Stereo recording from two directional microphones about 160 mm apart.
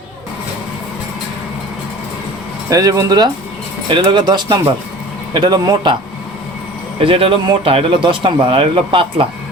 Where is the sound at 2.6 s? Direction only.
20° right (ahead or behind).